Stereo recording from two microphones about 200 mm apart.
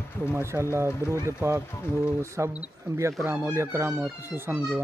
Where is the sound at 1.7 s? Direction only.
10° left (ahead or behind).